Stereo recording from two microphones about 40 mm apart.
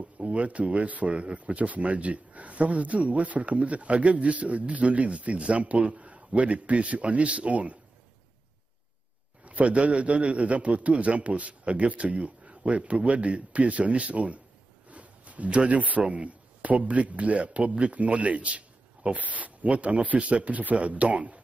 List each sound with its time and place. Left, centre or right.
0.0 s speech: right
9.4 s a man's voice: right